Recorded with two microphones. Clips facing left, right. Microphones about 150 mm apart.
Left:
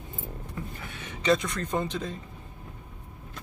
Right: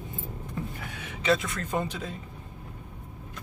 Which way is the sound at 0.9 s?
5° right (ahead or behind).